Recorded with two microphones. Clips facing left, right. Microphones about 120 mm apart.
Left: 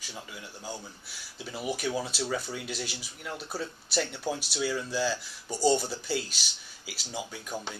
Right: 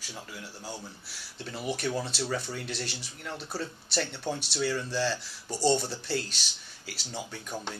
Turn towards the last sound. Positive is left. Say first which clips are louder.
# even
turn(degrees=0)  # may be behind; listen again after turning